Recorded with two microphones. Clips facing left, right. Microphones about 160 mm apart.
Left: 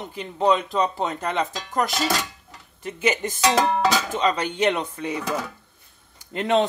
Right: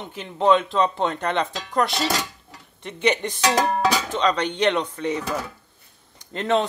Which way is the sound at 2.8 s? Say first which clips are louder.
Right 1 dB; 5° left (ahead or behind).